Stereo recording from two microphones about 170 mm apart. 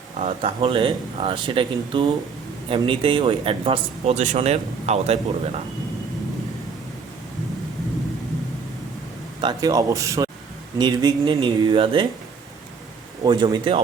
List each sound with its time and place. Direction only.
0.2 s speech: 35° right (ahead or behind)
9.4 s speech: 25° right (ahead or behind)
13.2 s speech: 25° right (ahead or behind)